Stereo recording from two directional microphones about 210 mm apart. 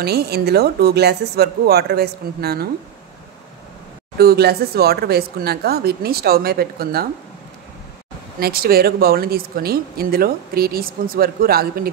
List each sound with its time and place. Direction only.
0.0 s speech: 50° right (ahead or behind)
4.2 s speech: 50° right (ahead or behind)
8.4 s speech: 45° right (ahead or behind)